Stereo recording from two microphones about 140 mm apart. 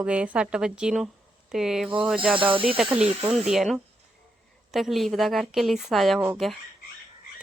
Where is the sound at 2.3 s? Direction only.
40° right (ahead or behind).